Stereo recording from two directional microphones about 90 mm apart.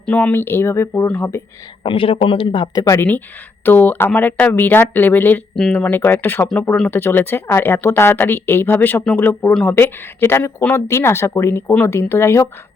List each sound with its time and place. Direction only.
0.0 s speech: 15° left (ahead or behind)
1.8 s speech: 75° left (ahead or behind)
2.7 s speech: 35° left (ahead or behind)
3.6 s speech: 20° left (ahead or behind)